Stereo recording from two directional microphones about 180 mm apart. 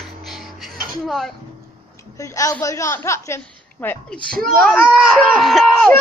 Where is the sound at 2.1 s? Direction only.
20° left (ahead or behind).